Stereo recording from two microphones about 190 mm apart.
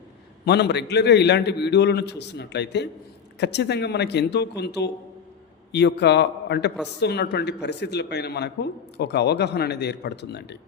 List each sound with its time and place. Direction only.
0.4 s speech: 60° left (ahead or behind)